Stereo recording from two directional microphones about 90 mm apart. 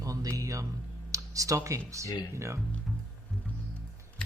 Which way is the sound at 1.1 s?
40° right (ahead or behind).